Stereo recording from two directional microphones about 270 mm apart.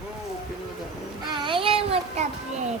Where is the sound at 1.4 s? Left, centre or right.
Centre.